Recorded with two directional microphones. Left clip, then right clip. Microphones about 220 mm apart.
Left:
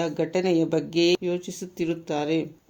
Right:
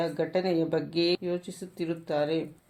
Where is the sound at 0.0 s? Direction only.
50° left (ahead or behind).